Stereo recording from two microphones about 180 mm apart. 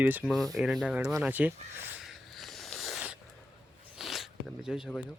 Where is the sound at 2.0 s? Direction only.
Centre (ahead or behind).